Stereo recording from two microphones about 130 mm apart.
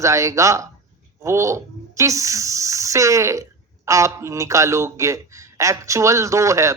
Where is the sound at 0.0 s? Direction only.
25° right (ahead or behind).